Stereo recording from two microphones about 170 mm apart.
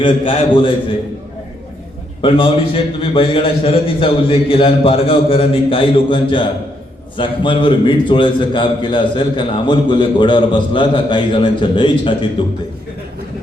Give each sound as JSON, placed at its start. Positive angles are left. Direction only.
{"t": 0.0, "sound": "a man's voice", "side_deg": 30}
{"t": 2.2, "sound": "a man's voice", "side_deg": 30}